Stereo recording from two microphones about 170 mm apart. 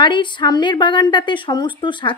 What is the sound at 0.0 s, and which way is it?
A woman's voice, 25° left (ahead or behind).